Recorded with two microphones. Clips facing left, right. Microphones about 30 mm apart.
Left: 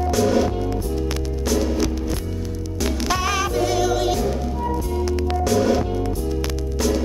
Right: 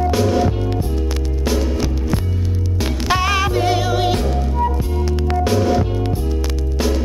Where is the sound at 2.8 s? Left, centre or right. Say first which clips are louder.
Right 3 dB; right.